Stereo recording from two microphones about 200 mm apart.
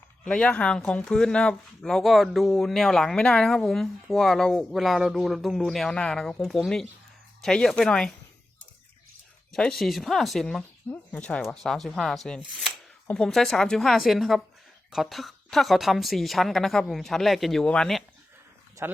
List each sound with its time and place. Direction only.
0.3 s speech: 5° left (ahead or behind)
9.5 s speech: 5° left (ahead or behind)
18.8 s speech: 10° right (ahead or behind)